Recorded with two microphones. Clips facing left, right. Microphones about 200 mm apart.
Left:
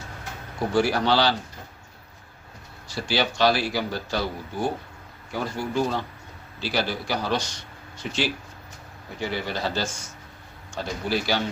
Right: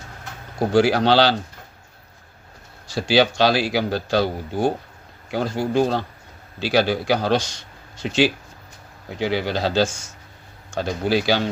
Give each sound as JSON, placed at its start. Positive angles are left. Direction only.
{"t": 0.7, "sound": "a man's voice", "side_deg": -90}
{"t": 2.8, "sound": "a man's voice", "side_deg": -90}